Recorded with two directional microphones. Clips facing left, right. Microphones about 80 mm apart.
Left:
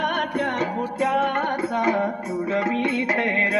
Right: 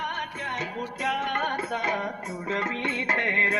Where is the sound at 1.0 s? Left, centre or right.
Left.